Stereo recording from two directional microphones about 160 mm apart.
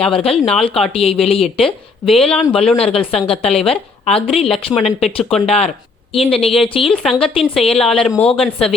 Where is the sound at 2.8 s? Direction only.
35° left (ahead or behind).